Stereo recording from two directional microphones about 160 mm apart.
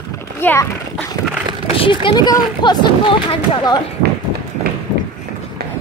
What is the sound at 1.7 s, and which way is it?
Speech, 30° left (ahead or behind).